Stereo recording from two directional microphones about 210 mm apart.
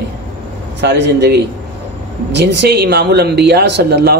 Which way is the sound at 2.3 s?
50° right (ahead or behind).